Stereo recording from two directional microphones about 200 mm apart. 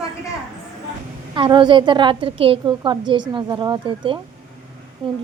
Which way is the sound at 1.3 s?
25° right (ahead or behind).